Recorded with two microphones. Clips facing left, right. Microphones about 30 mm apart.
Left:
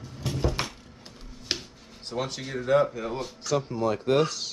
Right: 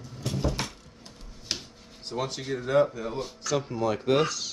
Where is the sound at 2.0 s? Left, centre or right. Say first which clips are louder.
Even; centre.